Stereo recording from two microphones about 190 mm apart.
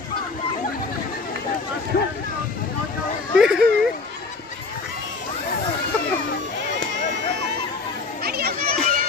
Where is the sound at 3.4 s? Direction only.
5° right (ahead or behind).